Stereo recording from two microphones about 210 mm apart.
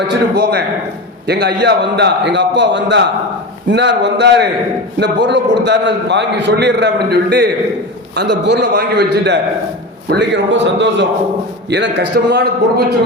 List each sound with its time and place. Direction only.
0.1 s a man's voice: 50° right (ahead or behind)